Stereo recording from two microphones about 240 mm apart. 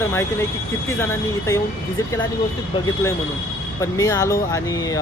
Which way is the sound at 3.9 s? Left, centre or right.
Centre.